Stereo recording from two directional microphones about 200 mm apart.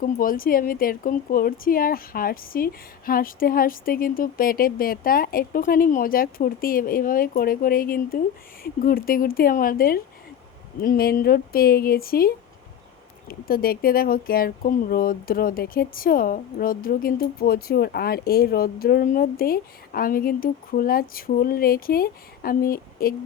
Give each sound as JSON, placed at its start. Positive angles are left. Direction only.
{"t": 0.0, "sound": "speech", "side_deg": 45}